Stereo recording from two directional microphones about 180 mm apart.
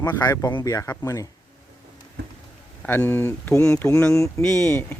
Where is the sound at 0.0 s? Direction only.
20° left (ahead or behind).